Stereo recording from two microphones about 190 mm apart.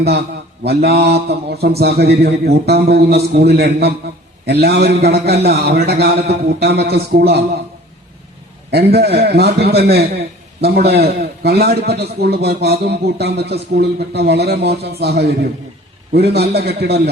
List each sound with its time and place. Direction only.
0.6 s speech: 55° right (ahead or behind)
8.7 s a man's voice: 55° right (ahead or behind)